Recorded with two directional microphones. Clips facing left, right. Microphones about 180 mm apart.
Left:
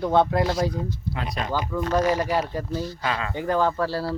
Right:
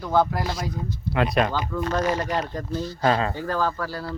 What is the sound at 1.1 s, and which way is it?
Speech, 70° right (ahead or behind).